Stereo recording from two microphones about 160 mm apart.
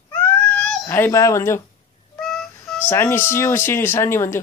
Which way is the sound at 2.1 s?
Centre (ahead or behind).